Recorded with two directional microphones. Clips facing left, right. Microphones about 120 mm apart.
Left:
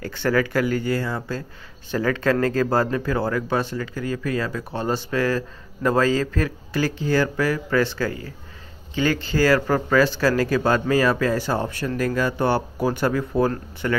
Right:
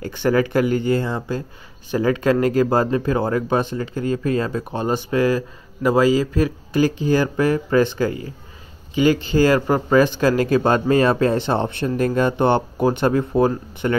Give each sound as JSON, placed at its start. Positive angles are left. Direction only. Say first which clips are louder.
{"t": 0.0, "sound": "speech", "louder": "right 3 dB", "side_deg": -20}